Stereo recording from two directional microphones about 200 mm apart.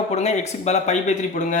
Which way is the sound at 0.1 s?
35° left (ahead or behind).